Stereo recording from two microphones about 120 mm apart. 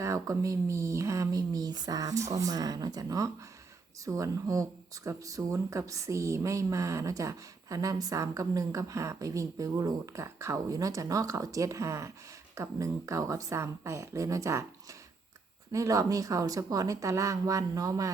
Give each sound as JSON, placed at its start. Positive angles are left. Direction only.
{"t": 0.0, "sound": "speech", "side_deg": -25}
{"t": 15.7, "sound": "speech", "side_deg": -25}